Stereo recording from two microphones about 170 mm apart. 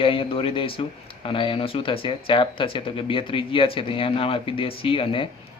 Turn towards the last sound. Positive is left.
turn(degrees=30)  # may be behind; listen again after turning